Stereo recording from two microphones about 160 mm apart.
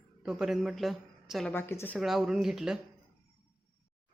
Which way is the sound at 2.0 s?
Centre (ahead or behind).